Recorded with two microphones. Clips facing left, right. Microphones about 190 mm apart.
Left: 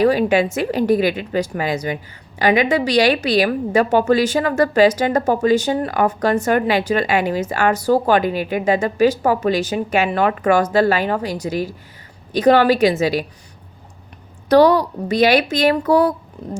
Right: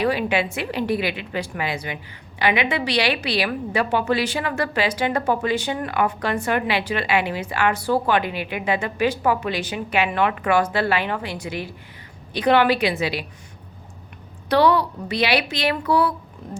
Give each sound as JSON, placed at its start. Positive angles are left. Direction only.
{"t": 0.0, "sound": "a woman's voice", "side_deg": 40}
{"t": 14.5, "sound": "a woman's voice", "side_deg": 40}